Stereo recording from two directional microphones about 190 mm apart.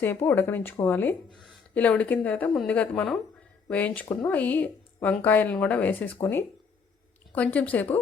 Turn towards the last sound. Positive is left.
turn(degrees=10)  # may be behind; listen again after turning